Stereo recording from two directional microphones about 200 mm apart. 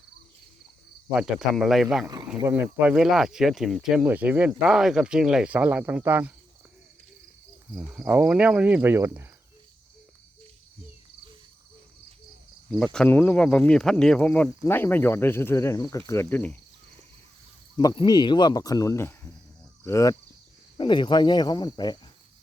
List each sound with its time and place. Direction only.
1.1 s speech: 5° right (ahead or behind)
7.7 s cricket: 5° right (ahead or behind)
12.8 s speech: 5° left (ahead or behind)
17.7 s speech: 20° left (ahead or behind)